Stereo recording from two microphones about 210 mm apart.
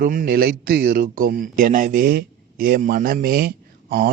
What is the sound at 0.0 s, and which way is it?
Speech, 45° right (ahead or behind).